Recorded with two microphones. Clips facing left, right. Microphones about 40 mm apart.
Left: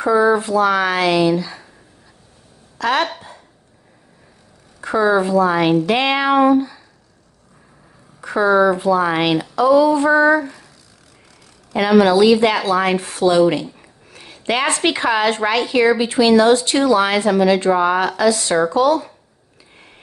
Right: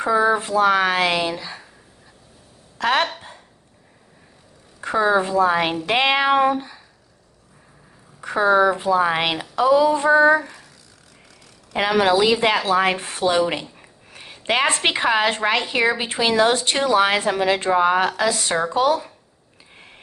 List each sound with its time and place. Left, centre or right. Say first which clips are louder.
0.0 s a woman's voice: left 4 dB; right
2.8 s speech: left 1 dB; right
4.8 s a woman's voice: left 3 dB; centre
8.3 s a woman's voice: left 2 dB; centre
12.0 s a woman's voice: left 4 dB; right
13.0 s a woman's voice: left 5 dB; right
17.6 s a woman's voice: left 2 dB; centre